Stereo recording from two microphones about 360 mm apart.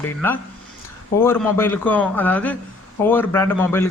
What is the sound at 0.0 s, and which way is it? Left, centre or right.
A man's voice, centre.